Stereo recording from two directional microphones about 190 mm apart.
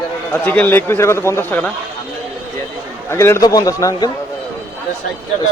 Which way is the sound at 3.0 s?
15° left (ahead or behind).